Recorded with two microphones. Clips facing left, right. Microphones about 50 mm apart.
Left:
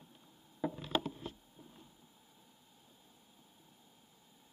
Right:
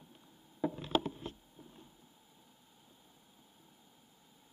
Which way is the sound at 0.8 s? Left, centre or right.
Right.